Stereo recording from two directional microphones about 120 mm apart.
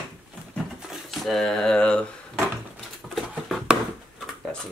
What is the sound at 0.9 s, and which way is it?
Speech, centre (ahead or behind).